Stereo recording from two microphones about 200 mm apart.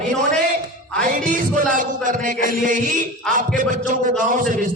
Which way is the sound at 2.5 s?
40° right (ahead or behind).